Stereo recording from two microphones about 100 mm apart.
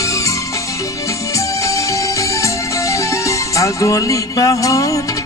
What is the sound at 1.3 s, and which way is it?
Music, 30° left (ahead or behind).